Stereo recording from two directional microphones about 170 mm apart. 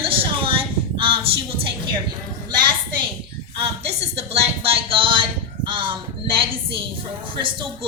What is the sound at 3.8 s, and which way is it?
A woman's voice, 40° right (ahead or behind).